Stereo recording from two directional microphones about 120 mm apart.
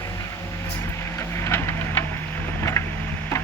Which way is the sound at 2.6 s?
25° left (ahead or behind).